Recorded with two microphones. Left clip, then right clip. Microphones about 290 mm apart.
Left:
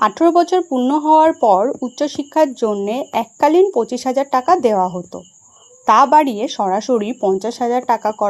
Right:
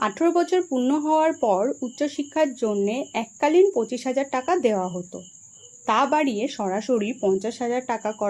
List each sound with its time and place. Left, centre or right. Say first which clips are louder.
0.0 s speech: left 9 dB; left